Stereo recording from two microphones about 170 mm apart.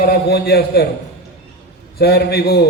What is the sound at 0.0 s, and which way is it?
Speech, 65° left (ahead or behind).